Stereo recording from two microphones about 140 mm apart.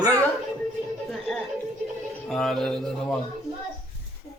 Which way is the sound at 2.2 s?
5° left (ahead or behind).